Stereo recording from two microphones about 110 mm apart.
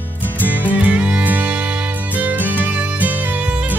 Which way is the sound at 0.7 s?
15° right (ahead or behind).